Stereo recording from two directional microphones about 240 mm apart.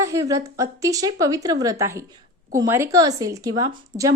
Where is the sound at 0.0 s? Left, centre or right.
Centre.